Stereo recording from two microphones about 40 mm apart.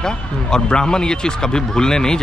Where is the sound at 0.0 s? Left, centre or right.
Centre.